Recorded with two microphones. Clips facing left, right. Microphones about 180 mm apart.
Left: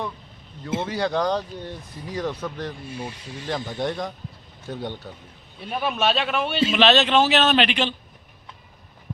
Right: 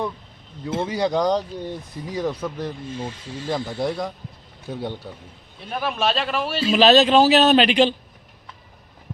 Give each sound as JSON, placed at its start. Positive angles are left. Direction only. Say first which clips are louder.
{"t": 0.9, "sound": "speech", "louder": "right 3 dB", "side_deg": -10}
{"t": 2.8, "sound": "speech", "louder": "right 3 dB", "side_deg": 15}
{"t": 3.8, "sound": "a man's voice", "louder": "right 2 dB", "side_deg": -5}
{"t": 6.7, "sound": "a man's voice", "louder": "right 6 dB", "side_deg": -35}